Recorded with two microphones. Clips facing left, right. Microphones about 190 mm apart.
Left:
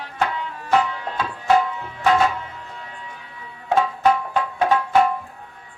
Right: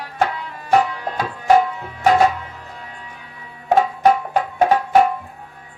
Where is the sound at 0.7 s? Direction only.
40° right (ahead or behind).